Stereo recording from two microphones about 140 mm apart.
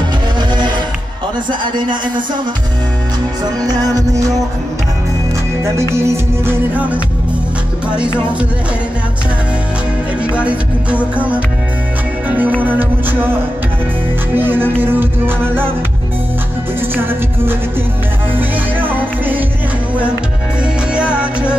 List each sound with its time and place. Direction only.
1.5 s a man's voice: 35° right (ahead or behind)
3.6 s music: 25° right (ahead or behind)
5.9 s music: 15° right (ahead or behind)
10.3 s music: 10° right (ahead or behind)
14.3 s music: 15° right (ahead or behind)
16.9 s music: 15° right (ahead or behind)
20.9 s music: 5° right (ahead or behind)